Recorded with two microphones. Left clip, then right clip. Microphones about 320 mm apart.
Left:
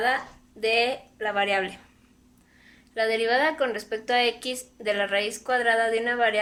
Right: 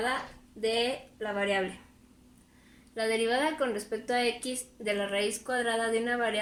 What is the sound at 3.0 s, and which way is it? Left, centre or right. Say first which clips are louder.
A woman's voice: left 5 dB; left.